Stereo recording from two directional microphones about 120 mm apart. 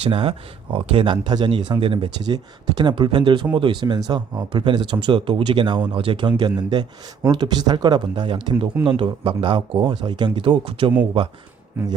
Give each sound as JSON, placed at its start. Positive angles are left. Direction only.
{"t": 0.0, "sound": "speech", "side_deg": -50}
{"t": 2.2, "sound": "speech", "side_deg": -35}